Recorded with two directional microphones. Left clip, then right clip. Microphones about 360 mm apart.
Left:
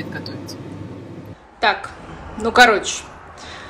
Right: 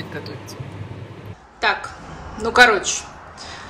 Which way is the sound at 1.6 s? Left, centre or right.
Centre.